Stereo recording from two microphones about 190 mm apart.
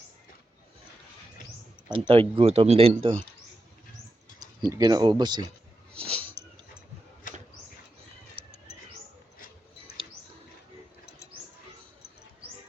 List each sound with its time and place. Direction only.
1.9 s speech: 30° right (ahead or behind)
4.6 s speech: 20° right (ahead or behind)
6.4 s dog: 55° left (ahead or behind)
8.4 s mouse: 30° right (ahead or behind)